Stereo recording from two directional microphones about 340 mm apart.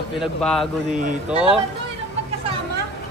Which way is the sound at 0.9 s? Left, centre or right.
Right.